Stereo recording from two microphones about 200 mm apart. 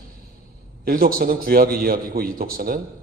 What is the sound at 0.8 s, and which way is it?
A man's voice, 45° right (ahead or behind).